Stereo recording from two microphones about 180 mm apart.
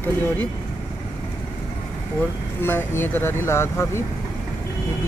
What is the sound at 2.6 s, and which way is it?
Speech, 10° left (ahead or behind).